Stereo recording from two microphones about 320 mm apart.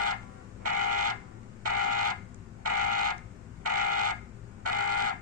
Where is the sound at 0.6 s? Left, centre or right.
Right.